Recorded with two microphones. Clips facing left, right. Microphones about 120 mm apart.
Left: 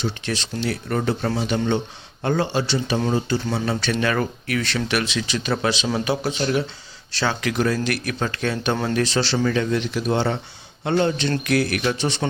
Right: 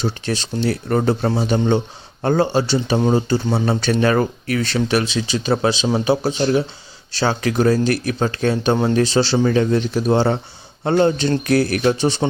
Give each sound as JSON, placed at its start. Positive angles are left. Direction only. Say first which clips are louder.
{"t": 0.0, "sound": "speech", "louder": "right 4 dB", "side_deg": -40}